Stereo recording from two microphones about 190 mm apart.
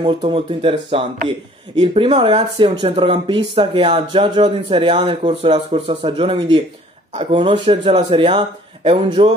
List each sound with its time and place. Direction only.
0.0 s speech: 30° right (ahead or behind)